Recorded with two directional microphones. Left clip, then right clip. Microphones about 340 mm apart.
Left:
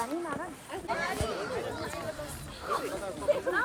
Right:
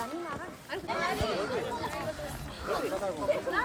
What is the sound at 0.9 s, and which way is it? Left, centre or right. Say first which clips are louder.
Speech: right 1 dB; right.